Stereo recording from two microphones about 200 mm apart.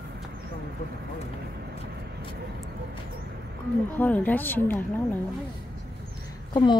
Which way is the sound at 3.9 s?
10° left (ahead or behind).